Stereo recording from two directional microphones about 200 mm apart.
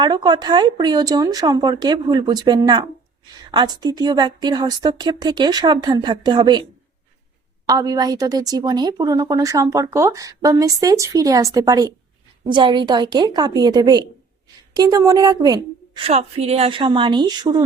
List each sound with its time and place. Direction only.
0.0 s speech: 20° right (ahead or behind)
7.7 s a woman's voice: 20° right (ahead or behind)
16.0 s speech: 30° right (ahead or behind)